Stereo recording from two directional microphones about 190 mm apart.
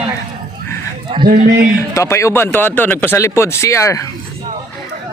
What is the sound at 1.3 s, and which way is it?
Speech, 45° right (ahead or behind).